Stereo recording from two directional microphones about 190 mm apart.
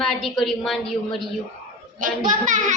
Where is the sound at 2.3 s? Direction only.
45° right (ahead or behind).